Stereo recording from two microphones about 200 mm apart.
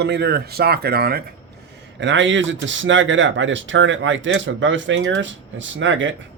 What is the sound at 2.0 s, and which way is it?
Speech, 65° right (ahead or behind).